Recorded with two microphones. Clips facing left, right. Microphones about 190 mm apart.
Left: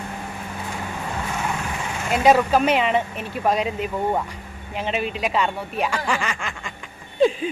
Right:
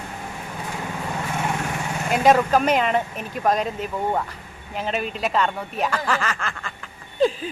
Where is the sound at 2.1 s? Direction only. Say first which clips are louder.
Even; 5° left (ahead or behind).